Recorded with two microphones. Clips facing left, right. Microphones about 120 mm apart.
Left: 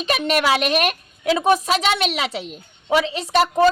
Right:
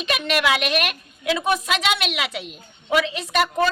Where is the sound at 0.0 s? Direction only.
40° left (ahead or behind).